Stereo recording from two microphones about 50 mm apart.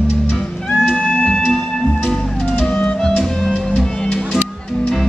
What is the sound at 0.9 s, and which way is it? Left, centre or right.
Music, left.